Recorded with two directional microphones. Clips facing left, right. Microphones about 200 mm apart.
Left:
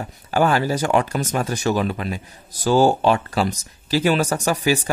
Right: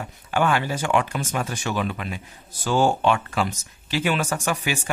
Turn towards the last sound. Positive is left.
turn(degrees=35)  # may be behind; listen again after turning